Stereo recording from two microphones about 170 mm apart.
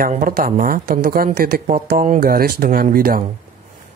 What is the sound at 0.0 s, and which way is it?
Speech, 55° right (ahead or behind).